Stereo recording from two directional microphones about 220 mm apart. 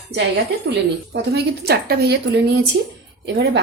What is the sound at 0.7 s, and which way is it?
A woman's voice, 50° right (ahead or behind).